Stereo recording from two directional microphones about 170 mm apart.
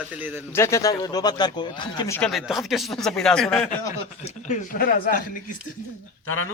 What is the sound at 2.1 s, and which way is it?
Speech, 5° left (ahead or behind).